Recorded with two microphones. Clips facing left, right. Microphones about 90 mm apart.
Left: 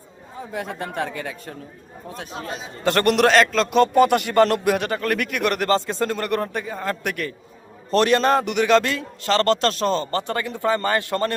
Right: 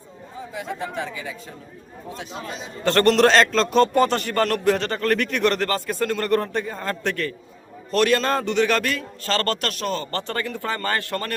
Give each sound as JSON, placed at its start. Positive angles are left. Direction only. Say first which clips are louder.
{"t": 0.5, "sound": "speech", "louder": "left 1 dB", "side_deg": 50}
{"t": 2.8, "sound": "a man's voice", "louder": "right 1 dB", "side_deg": 15}
{"t": 5.6, "sound": "a man's voice", "louder": "left 3 dB", "side_deg": 25}
{"t": 7.9, "sound": "a man's voice", "louder": "left 2 dB", "side_deg": 30}